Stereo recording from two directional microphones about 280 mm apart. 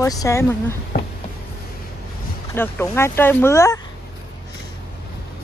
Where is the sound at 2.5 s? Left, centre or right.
Centre.